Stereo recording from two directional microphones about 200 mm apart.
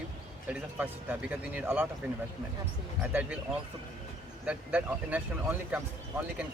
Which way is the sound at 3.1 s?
10° right (ahead or behind).